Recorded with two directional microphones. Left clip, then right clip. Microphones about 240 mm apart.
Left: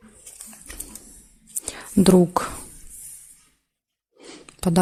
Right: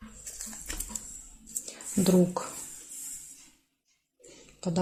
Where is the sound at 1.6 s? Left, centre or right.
Left.